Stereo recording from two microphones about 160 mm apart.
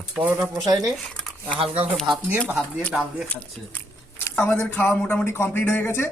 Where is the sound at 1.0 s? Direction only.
5° left (ahead or behind).